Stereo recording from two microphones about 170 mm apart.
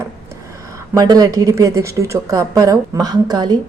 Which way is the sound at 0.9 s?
20° right (ahead or behind).